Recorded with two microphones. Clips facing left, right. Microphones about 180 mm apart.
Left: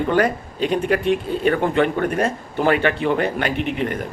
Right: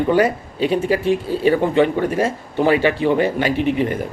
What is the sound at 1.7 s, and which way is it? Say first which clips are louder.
Speech: right 3 dB; 15° right (ahead or behind).